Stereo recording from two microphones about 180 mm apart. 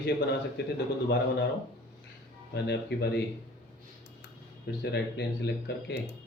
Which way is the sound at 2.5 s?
70° left (ahead or behind).